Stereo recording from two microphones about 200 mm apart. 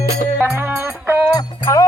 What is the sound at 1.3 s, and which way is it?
Music, 15° left (ahead or behind).